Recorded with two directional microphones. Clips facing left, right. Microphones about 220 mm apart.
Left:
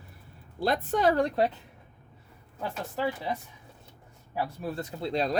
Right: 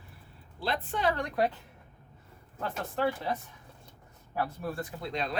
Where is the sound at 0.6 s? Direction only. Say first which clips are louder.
Left 6 dB; 45° left (ahead or behind); by 1.5 s 30° left (ahead or behind).